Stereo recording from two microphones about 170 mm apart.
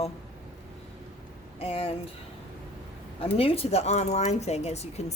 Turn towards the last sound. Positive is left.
turn(degrees=40)  # may be behind; listen again after turning